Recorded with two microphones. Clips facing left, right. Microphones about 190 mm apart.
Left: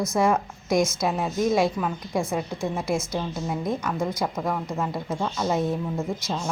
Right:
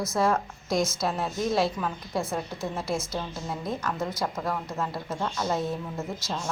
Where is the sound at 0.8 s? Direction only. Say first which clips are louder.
Left 3 dB; centre (ahead or behind).